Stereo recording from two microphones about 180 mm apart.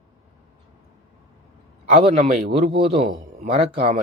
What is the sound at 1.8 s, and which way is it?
A man's voice, 40° right (ahead or behind).